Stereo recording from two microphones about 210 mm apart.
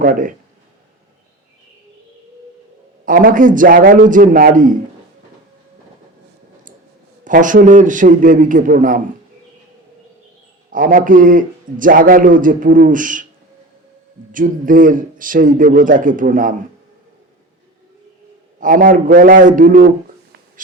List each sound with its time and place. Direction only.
0.0 s a man's voice: 40° right (ahead or behind)
3.1 s a man's voice: 40° right (ahead or behind)
7.3 s a man's voice: 40° right (ahead or behind)
10.7 s a man's voice: 40° right (ahead or behind)
14.3 s a man's voice: 40° right (ahead or behind)
18.6 s a man's voice: 40° right (ahead or behind)